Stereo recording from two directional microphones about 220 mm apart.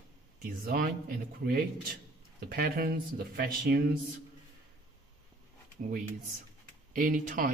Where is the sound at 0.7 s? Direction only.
40° right (ahead or behind).